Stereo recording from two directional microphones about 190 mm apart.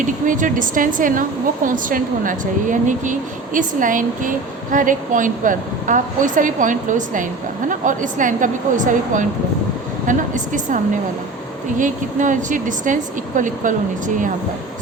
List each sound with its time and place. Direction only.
0.0 s a woman's voice: 45° right (ahead or behind)
11.8 s a woman's voice: 40° right (ahead or behind)